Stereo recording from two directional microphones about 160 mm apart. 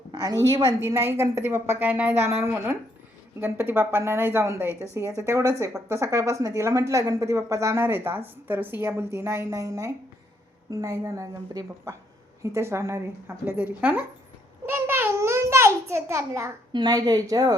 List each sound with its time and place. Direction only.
0.1 s a woman's voice: 20° right (ahead or behind)